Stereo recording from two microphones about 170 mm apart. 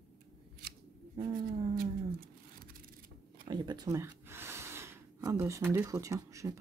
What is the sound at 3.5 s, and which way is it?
Speech, 25° right (ahead or behind).